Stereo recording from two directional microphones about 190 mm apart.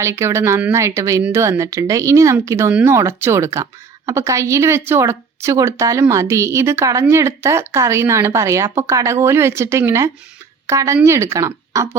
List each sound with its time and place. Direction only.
0.0 s a woman's voice: 15° right (ahead or behind)